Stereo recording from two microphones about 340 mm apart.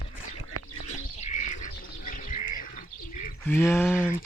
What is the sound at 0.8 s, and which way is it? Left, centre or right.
Bird, centre.